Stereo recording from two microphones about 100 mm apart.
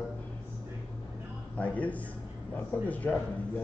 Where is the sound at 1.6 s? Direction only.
15° left (ahead or behind).